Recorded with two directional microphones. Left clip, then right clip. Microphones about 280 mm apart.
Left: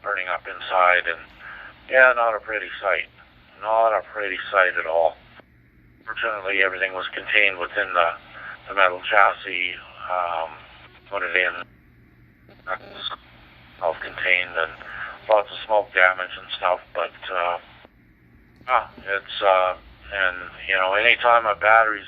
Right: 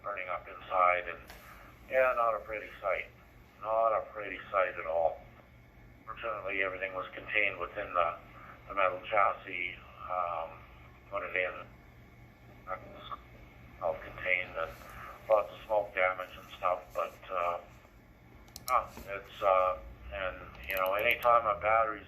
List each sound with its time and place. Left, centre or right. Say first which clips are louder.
0.0 s speech: left 12 dB; centre
12.6 s frog: left 12 dB; centre
13.7 s a man's voice: left 10 dB; centre
18.7 s speech: left 10 dB; centre